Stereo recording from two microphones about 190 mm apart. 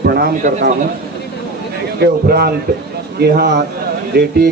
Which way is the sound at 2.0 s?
55° right (ahead or behind).